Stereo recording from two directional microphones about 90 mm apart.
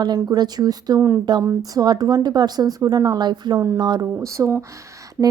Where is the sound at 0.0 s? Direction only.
50° right (ahead or behind).